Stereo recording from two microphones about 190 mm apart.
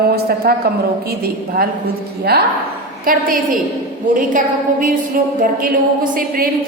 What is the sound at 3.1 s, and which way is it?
A woman's voice, 45° right (ahead or behind).